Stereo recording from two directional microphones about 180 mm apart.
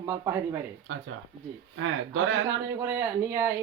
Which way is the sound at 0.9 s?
90° right.